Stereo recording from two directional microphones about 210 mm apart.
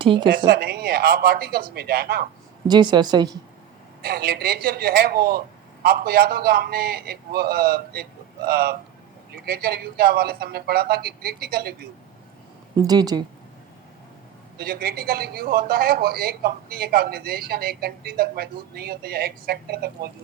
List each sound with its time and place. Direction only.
0.0 s speech: 25° right (ahead or behind)
0.3 s speech: 45° right (ahead or behind)
2.6 s speech: 20° right (ahead or behind)
4.0 s speech: 45° right (ahead or behind)
12.7 s speech: 20° right (ahead or behind)
14.6 s speech: 45° right (ahead or behind)